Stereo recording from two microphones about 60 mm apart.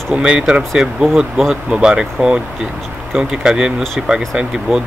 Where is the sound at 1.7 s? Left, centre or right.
Centre.